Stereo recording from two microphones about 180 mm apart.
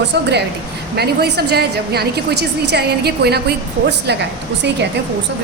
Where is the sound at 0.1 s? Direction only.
70° right (ahead or behind).